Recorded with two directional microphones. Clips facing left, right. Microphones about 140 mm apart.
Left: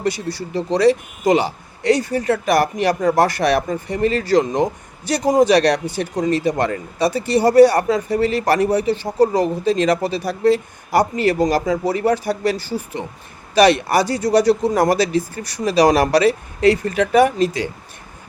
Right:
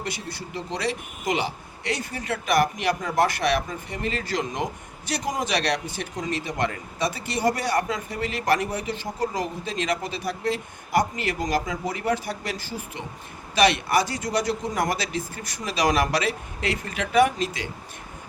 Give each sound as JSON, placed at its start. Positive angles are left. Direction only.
{"t": 0.0, "sound": "a man's voice", "side_deg": 35}